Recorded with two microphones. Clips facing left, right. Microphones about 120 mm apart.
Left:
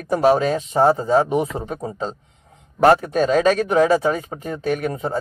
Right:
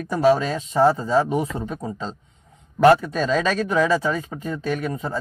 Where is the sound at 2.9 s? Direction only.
50° left (ahead or behind).